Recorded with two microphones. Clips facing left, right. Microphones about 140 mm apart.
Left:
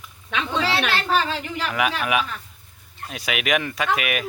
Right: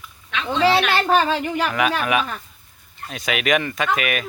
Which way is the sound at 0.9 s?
50° right (ahead or behind).